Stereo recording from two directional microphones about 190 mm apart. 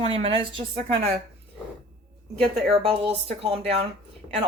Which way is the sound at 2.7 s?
30° right (ahead or behind).